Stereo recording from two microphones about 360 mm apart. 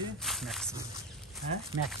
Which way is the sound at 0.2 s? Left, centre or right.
Centre.